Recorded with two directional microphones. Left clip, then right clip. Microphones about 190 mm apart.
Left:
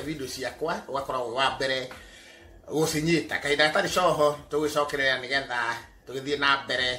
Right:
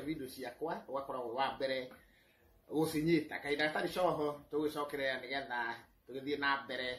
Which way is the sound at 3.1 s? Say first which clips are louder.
Left 9 dB; 10° left (ahead or behind).